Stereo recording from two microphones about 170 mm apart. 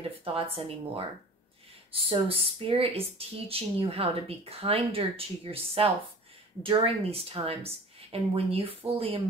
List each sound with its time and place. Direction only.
0.2 s speech: 30° right (ahead or behind)